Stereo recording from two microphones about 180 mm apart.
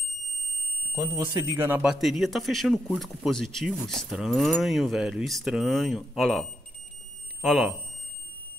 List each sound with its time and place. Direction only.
0.9 s speech: 20° right (ahead or behind); by 6.4 s centre (ahead or behind)
7.4 s speech: centre (ahead or behind)